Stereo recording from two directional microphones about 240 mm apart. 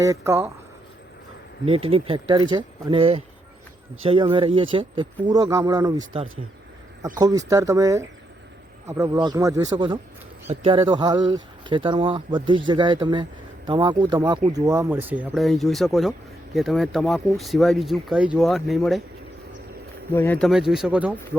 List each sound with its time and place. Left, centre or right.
0.0 s speech: centre
1.6 s speech: right
7.2 s speech: centre
20.1 s speech: centre